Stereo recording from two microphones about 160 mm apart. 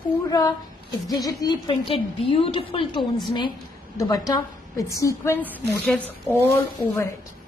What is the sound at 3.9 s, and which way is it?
A woman's voice, 20° left (ahead or behind).